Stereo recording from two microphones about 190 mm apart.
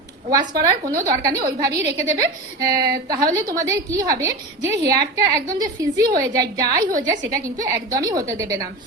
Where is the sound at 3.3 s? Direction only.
15° right (ahead or behind).